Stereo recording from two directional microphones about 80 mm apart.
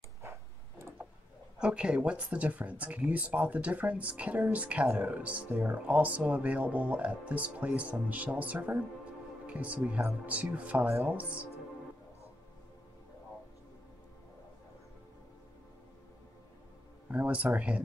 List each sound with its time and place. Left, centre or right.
0.2 s a sound: right
1.6 s speech: centre
17.1 s speech: centre